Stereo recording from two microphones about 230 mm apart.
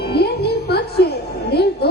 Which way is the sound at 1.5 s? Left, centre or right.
Left.